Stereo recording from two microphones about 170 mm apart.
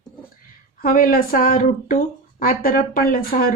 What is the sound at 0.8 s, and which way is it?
Speech, 60° left (ahead or behind).